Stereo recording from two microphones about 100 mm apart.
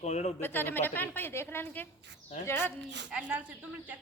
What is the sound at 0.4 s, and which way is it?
A woman's voice, 20° left (ahead or behind).